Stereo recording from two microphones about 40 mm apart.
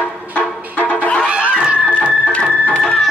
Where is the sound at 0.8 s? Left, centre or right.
Left.